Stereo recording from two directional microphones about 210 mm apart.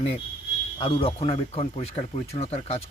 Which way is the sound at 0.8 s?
25° left (ahead or behind).